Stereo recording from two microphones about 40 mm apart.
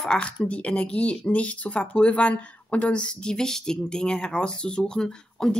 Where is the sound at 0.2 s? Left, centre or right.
Left.